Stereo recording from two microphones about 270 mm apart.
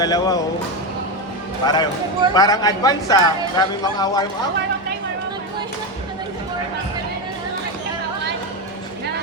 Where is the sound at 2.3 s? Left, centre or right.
Centre.